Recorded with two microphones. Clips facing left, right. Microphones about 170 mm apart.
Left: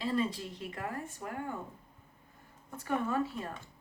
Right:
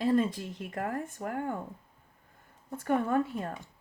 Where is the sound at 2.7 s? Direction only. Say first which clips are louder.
Right 5 dB; 55° right (ahead or behind).